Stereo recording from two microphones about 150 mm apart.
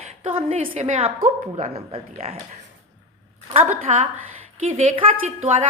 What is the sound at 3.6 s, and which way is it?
A woman's voice, 55° right (ahead or behind).